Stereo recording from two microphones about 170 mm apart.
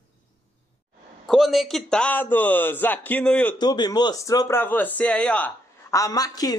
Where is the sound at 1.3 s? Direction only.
Centre (ahead or behind).